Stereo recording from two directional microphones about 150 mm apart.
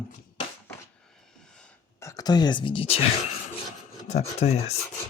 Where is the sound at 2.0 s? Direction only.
20° left (ahead or behind); by 3.0 s 40° left (ahead or behind).